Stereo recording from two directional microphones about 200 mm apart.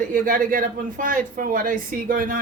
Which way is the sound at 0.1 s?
45° right (ahead or behind).